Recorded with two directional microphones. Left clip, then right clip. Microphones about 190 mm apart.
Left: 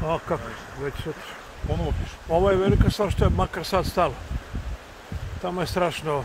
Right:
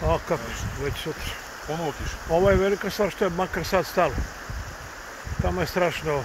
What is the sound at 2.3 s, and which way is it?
Speech, 15° left (ahead or behind).